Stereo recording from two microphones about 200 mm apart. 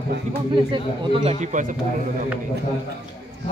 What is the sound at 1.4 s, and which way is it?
Speech, 40° right (ahead or behind).